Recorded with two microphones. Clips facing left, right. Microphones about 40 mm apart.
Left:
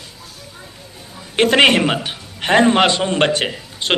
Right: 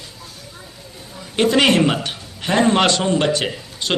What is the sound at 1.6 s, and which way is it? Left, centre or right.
Speech, left.